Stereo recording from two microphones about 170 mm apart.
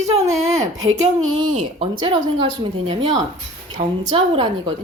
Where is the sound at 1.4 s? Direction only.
30° right (ahead or behind).